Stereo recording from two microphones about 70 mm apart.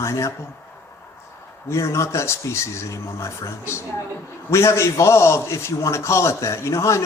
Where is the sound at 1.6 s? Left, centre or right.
Left.